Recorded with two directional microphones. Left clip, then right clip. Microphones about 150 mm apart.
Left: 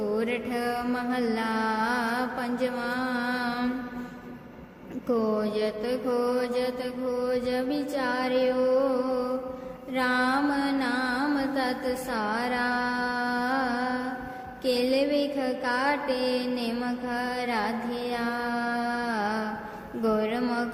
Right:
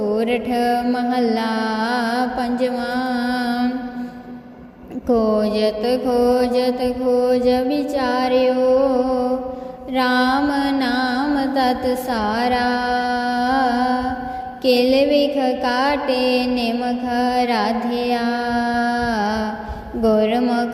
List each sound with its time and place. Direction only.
0.1 s mantra: 30° right (ahead or behind)
5.0 s mantra: 30° right (ahead or behind)
10.5 s music: 30° right (ahead or behind)
14.6 s mantra: 30° right (ahead or behind)
20.0 s a sound: 30° right (ahead or behind)